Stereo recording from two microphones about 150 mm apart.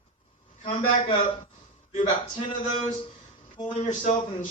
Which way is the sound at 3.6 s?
55° left (ahead or behind).